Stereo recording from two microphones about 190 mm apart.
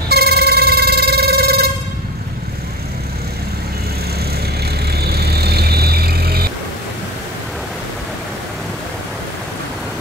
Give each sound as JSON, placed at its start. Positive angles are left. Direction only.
{"t": 0.1, "sound": "telephone bell ringing", "side_deg": -55}
{"t": 4.9, "sound": "vehicle", "side_deg": -55}